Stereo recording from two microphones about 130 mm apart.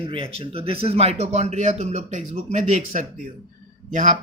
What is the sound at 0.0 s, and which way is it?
A man's voice, 45° right (ahead or behind).